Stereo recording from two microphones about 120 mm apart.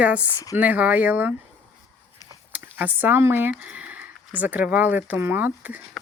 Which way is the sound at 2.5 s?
15° right (ahead or behind).